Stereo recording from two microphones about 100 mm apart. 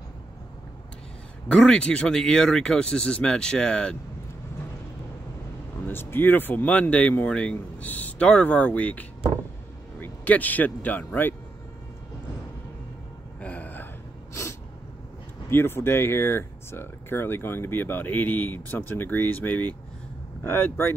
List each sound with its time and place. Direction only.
1.5 s speech: 10° left (ahead or behind)
5.9 s speech: 20° left (ahead or behind)
13.4 s a sound: 15° left (ahead or behind)
15.5 s speech: 25° left (ahead or behind)